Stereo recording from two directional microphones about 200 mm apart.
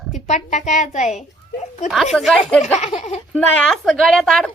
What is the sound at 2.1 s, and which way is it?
Speech, 5° left (ahead or behind).